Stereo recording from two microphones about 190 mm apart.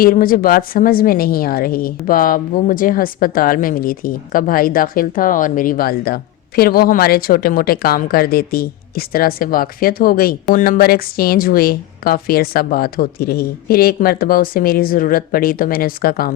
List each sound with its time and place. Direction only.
0.0 s a woman's voice: 50° left (ahead or behind)